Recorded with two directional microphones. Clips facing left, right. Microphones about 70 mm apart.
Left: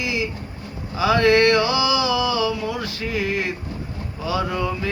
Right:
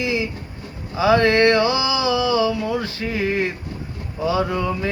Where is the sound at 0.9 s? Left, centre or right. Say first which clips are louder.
Right 1 dB; right.